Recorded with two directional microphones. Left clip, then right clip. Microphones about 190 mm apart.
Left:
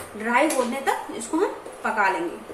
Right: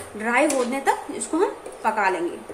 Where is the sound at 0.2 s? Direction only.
20° right (ahead or behind).